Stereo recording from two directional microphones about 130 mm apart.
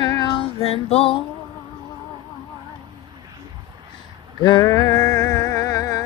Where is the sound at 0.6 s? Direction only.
50° left (ahead or behind).